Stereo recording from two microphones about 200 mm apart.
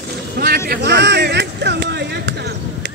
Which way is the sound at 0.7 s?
60° right (ahead or behind).